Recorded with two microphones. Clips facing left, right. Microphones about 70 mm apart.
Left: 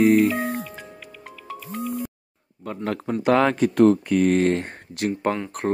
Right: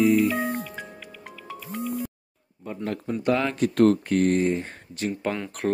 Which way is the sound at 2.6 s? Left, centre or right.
Left.